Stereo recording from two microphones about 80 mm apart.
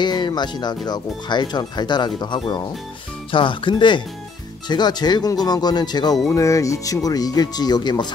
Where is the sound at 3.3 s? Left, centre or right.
Left.